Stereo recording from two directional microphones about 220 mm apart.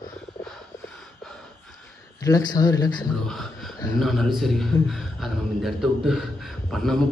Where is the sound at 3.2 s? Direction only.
Centre (ahead or behind).